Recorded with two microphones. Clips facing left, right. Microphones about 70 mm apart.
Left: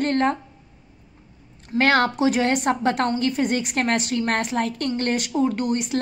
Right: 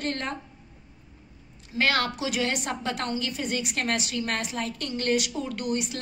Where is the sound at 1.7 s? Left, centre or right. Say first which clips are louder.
Left 7 dB; left.